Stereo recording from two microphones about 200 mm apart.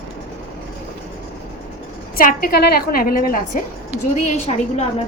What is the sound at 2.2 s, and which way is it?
A woman's voice, 45° left (ahead or behind).